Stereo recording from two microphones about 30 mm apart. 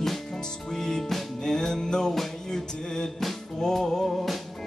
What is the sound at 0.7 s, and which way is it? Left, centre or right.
Music, centre.